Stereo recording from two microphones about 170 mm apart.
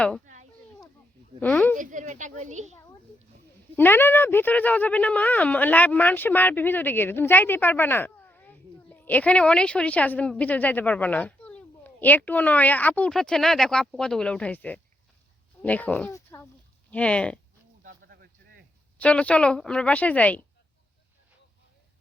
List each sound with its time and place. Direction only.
1.4 s speech: 10° left (ahead or behind)
1.7 s speech: 50° right (ahead or behind)
3.8 s speech: 10° left (ahead or behind)
18.1 s a sound: 70° right (ahead or behind)
18.9 s speech: 10° left (ahead or behind)